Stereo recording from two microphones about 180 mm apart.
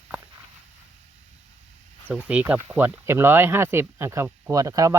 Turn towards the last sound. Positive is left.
turn(degrees=-15)  # may be behind; listen again after turning